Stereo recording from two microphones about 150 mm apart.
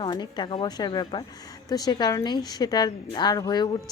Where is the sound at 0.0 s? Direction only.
30° left (ahead or behind).